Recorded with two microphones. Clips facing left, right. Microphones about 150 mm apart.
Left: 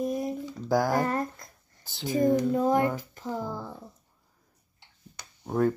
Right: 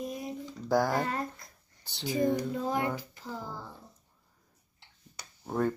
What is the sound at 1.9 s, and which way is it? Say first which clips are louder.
Speech: left 4 dB; centre (ahead or behind).